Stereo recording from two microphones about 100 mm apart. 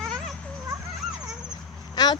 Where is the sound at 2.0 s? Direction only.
40° left (ahead or behind).